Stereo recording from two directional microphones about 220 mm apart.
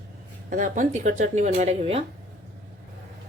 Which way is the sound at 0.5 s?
35° right (ahead or behind).